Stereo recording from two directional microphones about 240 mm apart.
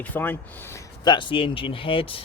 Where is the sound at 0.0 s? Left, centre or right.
Centre.